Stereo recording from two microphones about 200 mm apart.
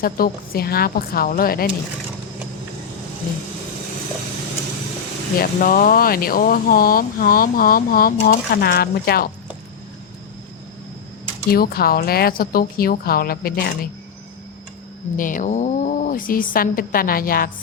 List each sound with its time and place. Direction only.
0.0 s speech: 50° left (ahead or behind)
5.4 s speech: 45° left (ahead or behind)
11.5 s speech: 50° left (ahead or behind)
15.1 s speech: 40° left (ahead or behind)